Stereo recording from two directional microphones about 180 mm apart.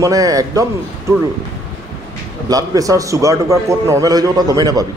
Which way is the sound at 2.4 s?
20° right (ahead or behind).